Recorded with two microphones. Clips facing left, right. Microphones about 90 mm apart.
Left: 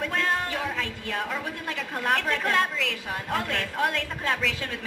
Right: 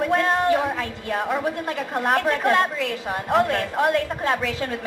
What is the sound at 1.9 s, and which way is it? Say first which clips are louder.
A woman's voice: right 5 dB; 40° right (ahead or behind).